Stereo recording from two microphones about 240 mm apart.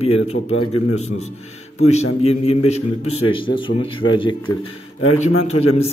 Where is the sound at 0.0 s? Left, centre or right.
Left.